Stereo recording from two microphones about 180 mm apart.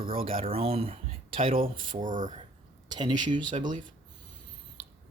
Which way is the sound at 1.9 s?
45° right (ahead or behind).